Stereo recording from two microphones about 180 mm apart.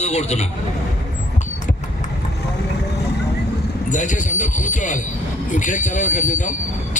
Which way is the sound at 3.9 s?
45° left (ahead or behind).